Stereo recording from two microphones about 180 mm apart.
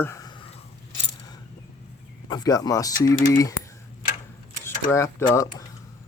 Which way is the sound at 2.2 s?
20° left (ahead or behind).